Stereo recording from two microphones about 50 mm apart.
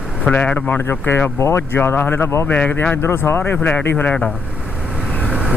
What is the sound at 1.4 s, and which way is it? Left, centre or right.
Speech, left.